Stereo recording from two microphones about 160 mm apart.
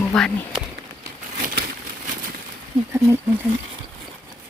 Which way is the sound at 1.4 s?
55° right (ahead or behind).